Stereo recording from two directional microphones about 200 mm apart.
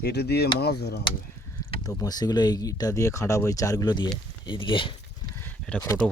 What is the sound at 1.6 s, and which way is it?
Speech, 15° left (ahead or behind).